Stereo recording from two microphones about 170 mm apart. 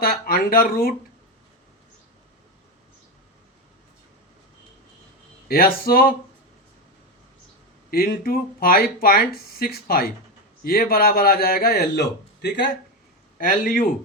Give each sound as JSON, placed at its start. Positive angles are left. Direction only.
{"t": 0.0, "sound": "speech", "side_deg": 60}
{"t": 5.5, "sound": "speech", "side_deg": 60}
{"t": 7.9, "sound": "speech", "side_deg": 60}
{"t": 13.4, "sound": "speech", "side_deg": 55}